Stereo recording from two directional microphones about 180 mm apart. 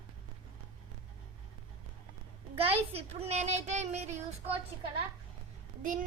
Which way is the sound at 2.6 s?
30° right (ahead or behind).